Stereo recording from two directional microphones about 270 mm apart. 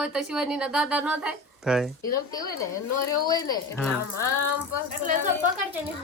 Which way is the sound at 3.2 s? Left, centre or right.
Centre.